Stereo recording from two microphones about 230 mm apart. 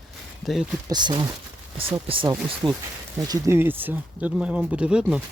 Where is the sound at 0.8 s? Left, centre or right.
Centre.